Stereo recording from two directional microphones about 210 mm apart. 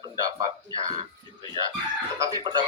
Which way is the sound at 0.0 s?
20° right (ahead or behind).